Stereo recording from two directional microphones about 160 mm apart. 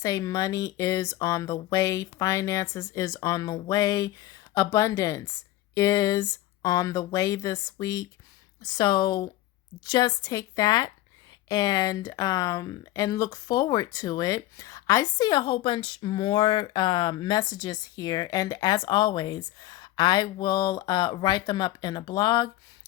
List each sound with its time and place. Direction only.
0.0 s speech: 20° left (ahead or behind)